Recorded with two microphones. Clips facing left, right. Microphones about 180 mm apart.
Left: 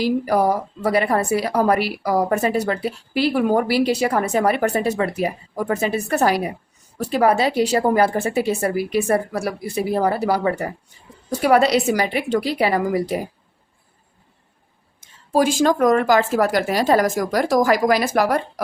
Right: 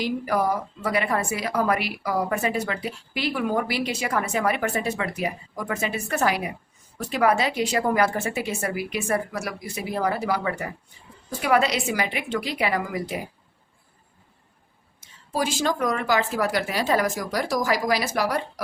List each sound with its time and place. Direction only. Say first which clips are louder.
0.0 s a woman's voice: left 6 dB; 35° left (ahead or behind)
15.0 s a sound: left 9 dB; 50° left (ahead or behind)
15.6 s speech: left 8 dB; 45° left (ahead or behind)